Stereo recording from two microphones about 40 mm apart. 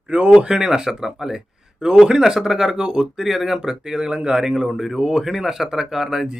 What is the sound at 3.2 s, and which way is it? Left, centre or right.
Speech, centre.